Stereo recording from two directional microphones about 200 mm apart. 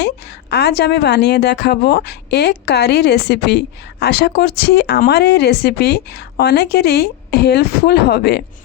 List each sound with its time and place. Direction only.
0.5 s speech: 55° left (ahead or behind)